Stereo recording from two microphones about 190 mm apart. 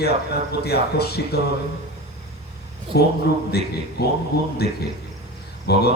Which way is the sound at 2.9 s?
60° left (ahead or behind).